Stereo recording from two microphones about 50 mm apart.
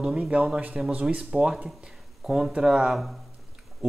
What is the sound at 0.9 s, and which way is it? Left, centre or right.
Speech, right.